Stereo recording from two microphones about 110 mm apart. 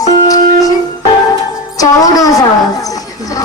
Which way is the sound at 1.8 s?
35° left (ahead or behind).